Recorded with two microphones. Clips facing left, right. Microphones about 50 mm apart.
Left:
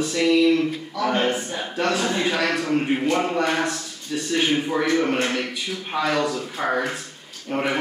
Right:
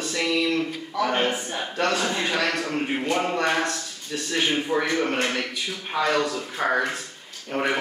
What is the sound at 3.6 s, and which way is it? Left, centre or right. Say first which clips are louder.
Speech: left 2 dB; centre.